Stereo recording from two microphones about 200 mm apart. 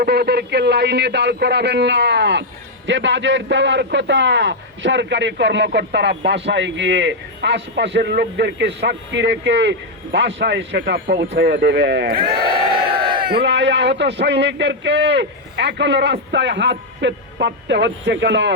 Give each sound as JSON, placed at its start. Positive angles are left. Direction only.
{"t": 0.0, "sound": "a man's voice", "side_deg": -55}